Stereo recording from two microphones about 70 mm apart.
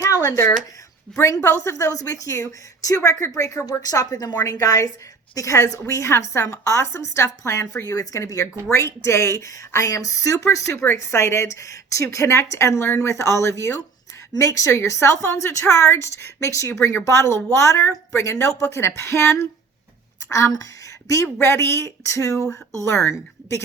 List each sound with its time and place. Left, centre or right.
0.0 s a sound: left
1.2 s a woman's voice: left
21.1 s a woman's voice: left